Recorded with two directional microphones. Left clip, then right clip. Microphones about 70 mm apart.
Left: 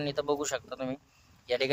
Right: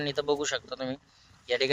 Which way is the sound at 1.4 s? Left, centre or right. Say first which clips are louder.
Right 2 dB; left.